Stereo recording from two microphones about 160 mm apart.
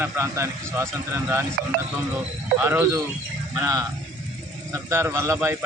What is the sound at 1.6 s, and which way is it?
Speech, 70° right (ahead or behind).